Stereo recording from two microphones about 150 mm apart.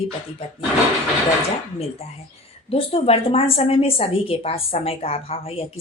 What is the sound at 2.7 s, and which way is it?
A woman's voice, 40° left (ahead or behind).